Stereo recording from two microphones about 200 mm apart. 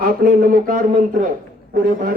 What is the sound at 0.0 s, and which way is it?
Speech, 45° right (ahead or behind).